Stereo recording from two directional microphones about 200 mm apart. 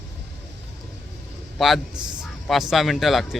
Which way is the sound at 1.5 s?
Centre (ahead or behind).